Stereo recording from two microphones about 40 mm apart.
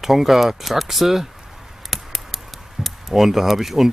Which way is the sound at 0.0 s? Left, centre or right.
Centre.